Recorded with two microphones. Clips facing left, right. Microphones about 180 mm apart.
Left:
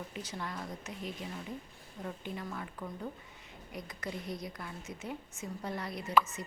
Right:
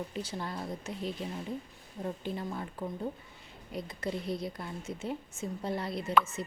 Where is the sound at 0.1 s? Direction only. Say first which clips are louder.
Right 4 dB; 30° right (ahead or behind).